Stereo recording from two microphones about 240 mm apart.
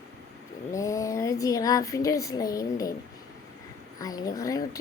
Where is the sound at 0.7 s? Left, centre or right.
Centre.